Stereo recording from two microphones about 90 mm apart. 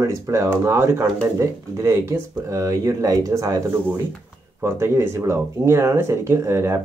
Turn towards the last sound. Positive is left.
turn(degrees=-30)  # may be behind; listen again after turning